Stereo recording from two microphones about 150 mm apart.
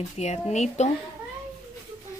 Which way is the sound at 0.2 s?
50° left (ahead or behind).